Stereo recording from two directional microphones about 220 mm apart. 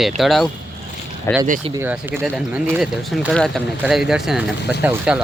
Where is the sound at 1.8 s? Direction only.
10° right (ahead or behind).